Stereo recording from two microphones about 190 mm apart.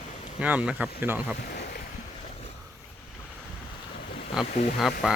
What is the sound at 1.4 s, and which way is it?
Boat, 50° left (ahead or behind).